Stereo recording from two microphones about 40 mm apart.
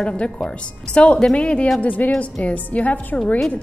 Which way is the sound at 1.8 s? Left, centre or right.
Left.